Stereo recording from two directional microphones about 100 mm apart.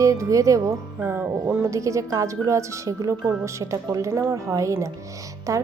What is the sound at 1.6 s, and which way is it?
Speech, 30° right (ahead or behind).